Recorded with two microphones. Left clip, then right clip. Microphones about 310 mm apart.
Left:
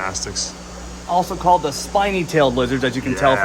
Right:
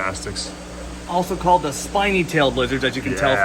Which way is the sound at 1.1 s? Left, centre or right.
Left.